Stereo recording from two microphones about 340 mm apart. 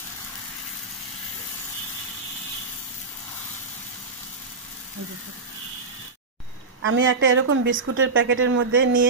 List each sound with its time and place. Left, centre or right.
6.8 s speech: right